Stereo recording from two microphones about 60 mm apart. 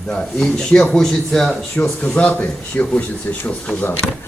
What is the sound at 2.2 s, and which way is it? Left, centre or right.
Speech, left.